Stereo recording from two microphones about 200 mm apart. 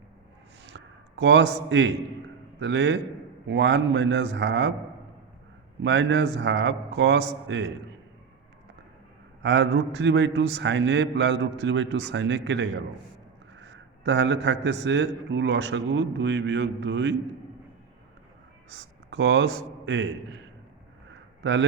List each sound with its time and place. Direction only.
0.7 s a sound: 60° right (ahead or behind)
2.6 s a man's voice: 65° right (ahead or behind)
5.8 s a man's voice: 60° right (ahead or behind)
9.4 s a man's voice: 60° right (ahead or behind)
18.7 s a man's voice: 60° right (ahead or behind)
21.4 s speech: 65° right (ahead or behind)